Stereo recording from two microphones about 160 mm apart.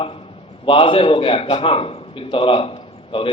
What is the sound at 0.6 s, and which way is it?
A man's voice, 35° left (ahead or behind).